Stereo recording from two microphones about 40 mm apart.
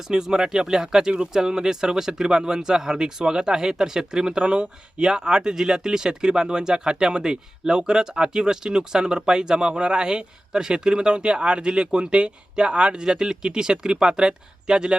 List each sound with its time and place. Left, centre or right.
0.1 s speech: centre